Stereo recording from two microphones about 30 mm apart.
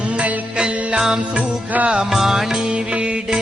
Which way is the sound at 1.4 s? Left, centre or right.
Right.